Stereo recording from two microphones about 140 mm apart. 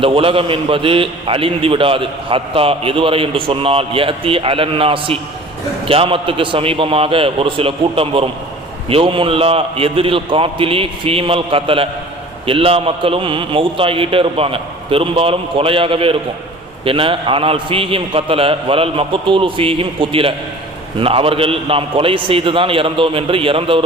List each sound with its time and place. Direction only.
0.0 s a man's voice: 40° right (ahead or behind)